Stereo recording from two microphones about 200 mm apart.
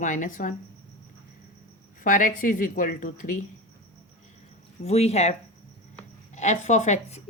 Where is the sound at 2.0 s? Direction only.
40° left (ahead or behind).